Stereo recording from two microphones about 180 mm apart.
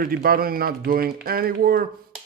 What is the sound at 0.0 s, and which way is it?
Speech, 55° right (ahead or behind).